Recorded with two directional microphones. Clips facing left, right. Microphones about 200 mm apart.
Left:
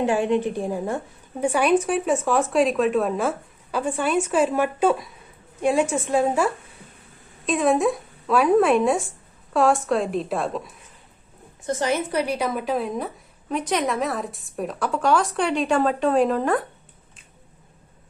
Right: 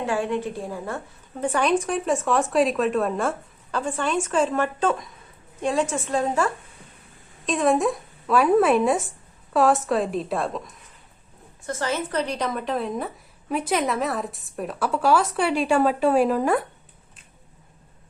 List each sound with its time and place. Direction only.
0.0 s a woman's voice: 20° left (ahead or behind); by 10.7 s centre (ahead or behind)
11.6 s a woman's voice: 15° left (ahead or behind); by 16.6 s 10° right (ahead or behind)